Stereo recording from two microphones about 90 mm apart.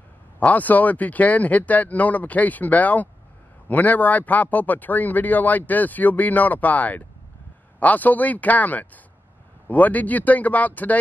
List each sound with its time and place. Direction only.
0.4 s speech: 15° left (ahead or behind)